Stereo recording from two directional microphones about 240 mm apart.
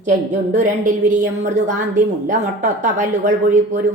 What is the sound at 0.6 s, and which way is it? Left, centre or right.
A woman's voice, right.